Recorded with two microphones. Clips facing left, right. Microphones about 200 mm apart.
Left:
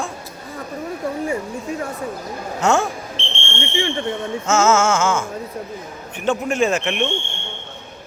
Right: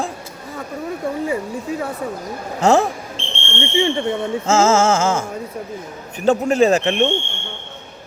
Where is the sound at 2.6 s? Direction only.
35° right (ahead or behind).